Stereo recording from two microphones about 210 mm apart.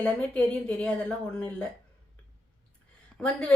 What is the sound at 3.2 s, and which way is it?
Speech, 10° left (ahead or behind).